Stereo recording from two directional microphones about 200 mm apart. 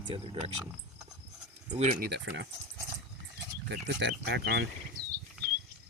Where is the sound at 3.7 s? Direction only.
60° right (ahead or behind).